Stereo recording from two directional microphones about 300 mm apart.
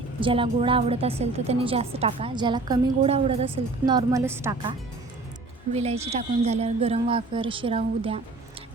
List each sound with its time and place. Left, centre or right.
0.2 s a woman's voice: centre
5.7 s a woman's voice: right